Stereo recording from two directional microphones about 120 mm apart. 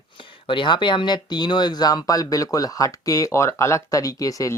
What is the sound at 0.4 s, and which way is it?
Speech, 40° left (ahead or behind).